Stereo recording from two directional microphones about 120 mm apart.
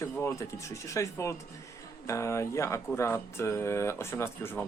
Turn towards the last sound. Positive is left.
turn(degrees=20)  # may be behind; listen again after turning